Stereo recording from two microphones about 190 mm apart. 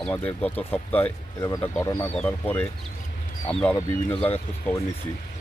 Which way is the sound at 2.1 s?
5° left (ahead or behind).